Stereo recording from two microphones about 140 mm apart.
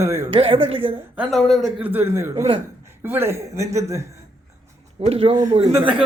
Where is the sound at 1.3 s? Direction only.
Centre (ahead or behind).